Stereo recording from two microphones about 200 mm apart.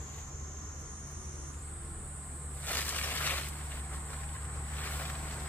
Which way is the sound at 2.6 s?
10° left (ahead or behind).